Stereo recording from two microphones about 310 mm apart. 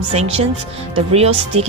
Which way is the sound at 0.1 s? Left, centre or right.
Centre.